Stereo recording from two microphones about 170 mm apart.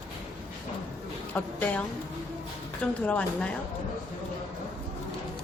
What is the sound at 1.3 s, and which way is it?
Speech, 10° left (ahead or behind).